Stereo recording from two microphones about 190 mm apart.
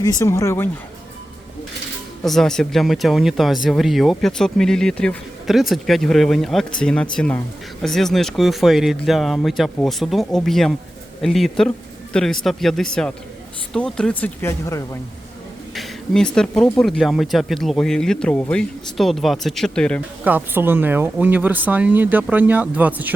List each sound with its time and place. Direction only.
0.0 s speech: 20° left (ahead or behind)
2.2 s speech: centre (ahead or behind)
15.7 s speech: centre (ahead or behind)
20.2 s speech: 10° right (ahead or behind)